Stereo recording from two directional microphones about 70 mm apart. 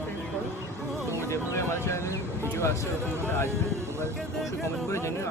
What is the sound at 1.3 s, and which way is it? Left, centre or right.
Music, left.